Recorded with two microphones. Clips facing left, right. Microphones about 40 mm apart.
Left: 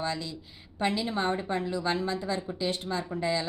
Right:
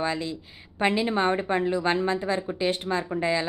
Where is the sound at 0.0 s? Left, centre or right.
Right.